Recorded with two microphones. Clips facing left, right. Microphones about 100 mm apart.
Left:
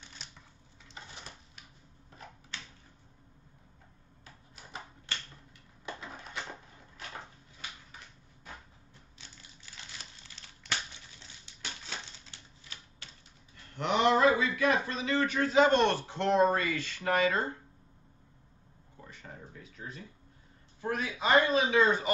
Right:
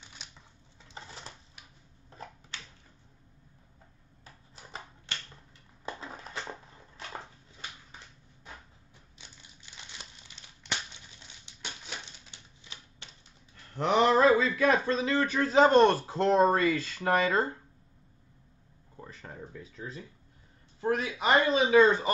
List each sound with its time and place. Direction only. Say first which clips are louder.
5.9 s a sound: right 2 dB; 30° right (ahead or behind)
9.2 s crumpling: even; 20° right (ahead or behind)
11.4 s typewriter: right 1 dB; 20° right (ahead or behind)
13.7 s speech: right 3 dB; 35° right (ahead or behind)
18.9 s a sound: right 4 dB; 35° right (ahead or behind)
21.5 s speech: right 4 dB; 25° right (ahead or behind)